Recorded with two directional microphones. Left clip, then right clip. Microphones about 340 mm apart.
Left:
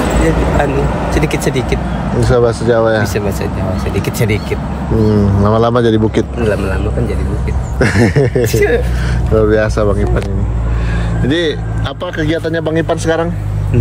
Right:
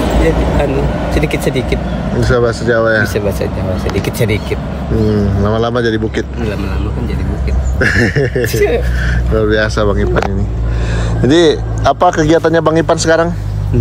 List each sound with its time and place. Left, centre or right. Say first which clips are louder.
0.1 s speech: even; left
1.1 s speech: right 1 dB; centre
7.8 s speech: even; centre
8.5 s speech: left 1 dB; centre
11.2 s speech: right 6 dB; right
12.4 s speech: right 4 dB; centre